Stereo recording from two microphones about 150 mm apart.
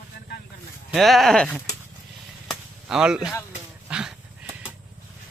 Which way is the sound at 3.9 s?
5° right (ahead or behind).